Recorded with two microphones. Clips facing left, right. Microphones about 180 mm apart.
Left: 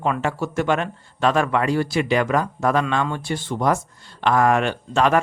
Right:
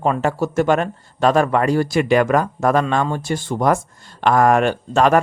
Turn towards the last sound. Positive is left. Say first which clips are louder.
# right 4 dB
turn(degrees=-45)  # may be behind; listen again after turning